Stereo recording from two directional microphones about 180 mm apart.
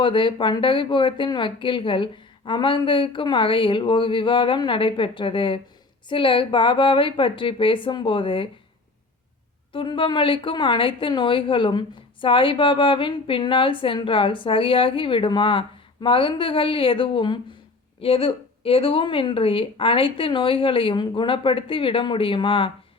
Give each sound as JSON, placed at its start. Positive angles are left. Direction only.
{"t": 0.0, "sound": "a woman's voice", "side_deg": 25}
{"t": 9.7, "sound": "a woman's voice", "side_deg": 30}